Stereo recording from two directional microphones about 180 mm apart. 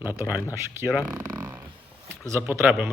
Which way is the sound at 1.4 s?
10° right (ahead or behind).